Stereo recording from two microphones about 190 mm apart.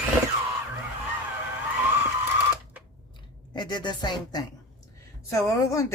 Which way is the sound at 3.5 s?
25° left (ahead or behind).